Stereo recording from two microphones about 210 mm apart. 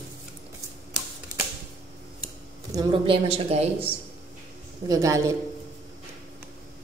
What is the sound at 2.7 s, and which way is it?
A woman's voice, 25° right (ahead or behind).